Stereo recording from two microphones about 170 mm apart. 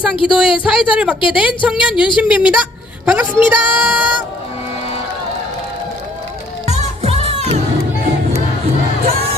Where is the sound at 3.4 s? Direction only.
10° right (ahead or behind).